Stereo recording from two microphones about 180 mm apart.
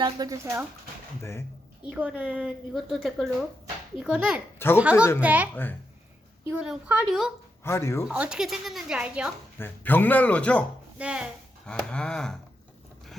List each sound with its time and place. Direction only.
0.0 s speech: 20° right (ahead or behind)
1.2 s speech: 15° left (ahead or behind)
1.9 s a woman's voice: 5° right (ahead or behind)
7.6 s speech: 15° left (ahead or behind)
8.0 s a woman's voice: 5° right (ahead or behind)
9.6 s speech: 10° left (ahead or behind)
10.9 s a woman's voice: 5° right (ahead or behind)
11.6 s a woman's voice: 5° left (ahead or behind)